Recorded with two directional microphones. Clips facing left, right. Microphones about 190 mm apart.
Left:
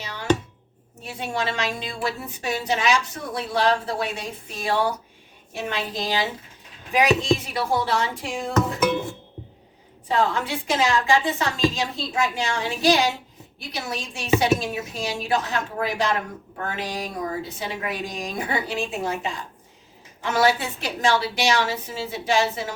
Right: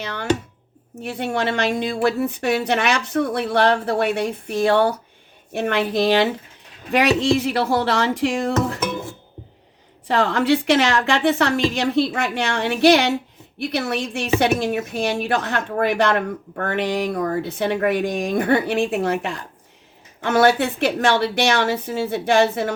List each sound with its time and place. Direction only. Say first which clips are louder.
0.0 s chopping: right 6 dB; 55° right (ahead or behind)
1.0 s a woman's voice: right 5 dB; 60° right (ahead or behind); by 8.5 s 75° right (ahead or behind)
10.1 s a woman's voice: right 5 dB; 75° right (ahead or behind); by 22.7 s 55° right (ahead or behind)